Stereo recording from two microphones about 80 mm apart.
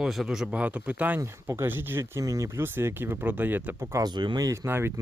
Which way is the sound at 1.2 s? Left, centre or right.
Right.